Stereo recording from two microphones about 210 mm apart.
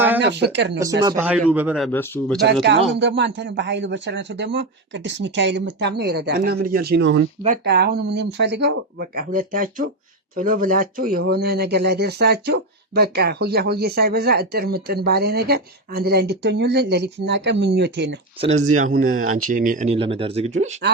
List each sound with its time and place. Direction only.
0.2 s speech: 55° right (ahead or behind)
1.0 s a man's voice: 10° right (ahead or behind)
1.9 s speech: 10° left (ahead or behind)
2.6 s speech: 55° right (ahead or behind)
18.3 s speech: 30° right (ahead or behind)